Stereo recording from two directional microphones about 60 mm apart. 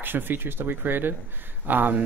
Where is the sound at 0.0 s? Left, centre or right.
Right.